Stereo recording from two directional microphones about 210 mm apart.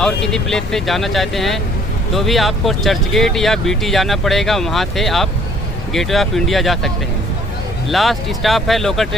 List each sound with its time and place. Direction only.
0.0 s speech: 5° left (ahead or behind)
7.9 s speech: centre (ahead or behind)